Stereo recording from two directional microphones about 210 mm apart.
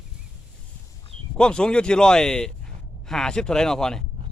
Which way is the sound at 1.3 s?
5° left (ahead or behind).